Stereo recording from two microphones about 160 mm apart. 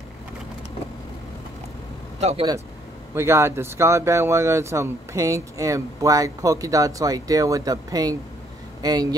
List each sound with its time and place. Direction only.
2.1 s speech: 40° right (ahead or behind)
3.2 s speech: 15° right (ahead or behind)